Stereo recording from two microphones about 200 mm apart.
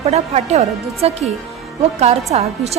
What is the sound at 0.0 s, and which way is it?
A woman's voice, 30° right (ahead or behind).